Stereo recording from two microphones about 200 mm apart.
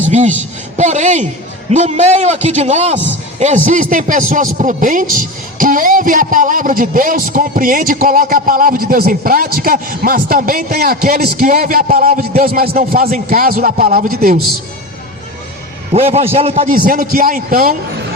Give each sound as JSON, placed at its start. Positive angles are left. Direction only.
{"t": 0.0, "sound": "a sound", "side_deg": -35}
{"t": 0.8, "sound": "a man's voice", "side_deg": -35}
{"t": 15.9, "sound": "a man's voice", "side_deg": -30}
{"t": 16.6, "sound": "a man's voice", "side_deg": -45}